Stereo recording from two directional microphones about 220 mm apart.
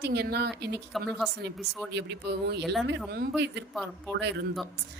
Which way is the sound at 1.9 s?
50° right (ahead or behind).